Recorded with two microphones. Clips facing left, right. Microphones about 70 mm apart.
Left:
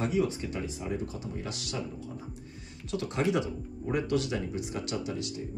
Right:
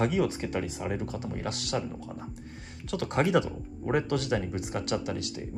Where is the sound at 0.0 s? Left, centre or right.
Right.